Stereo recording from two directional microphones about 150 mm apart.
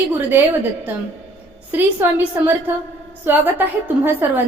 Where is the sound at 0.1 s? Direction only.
15° right (ahead or behind).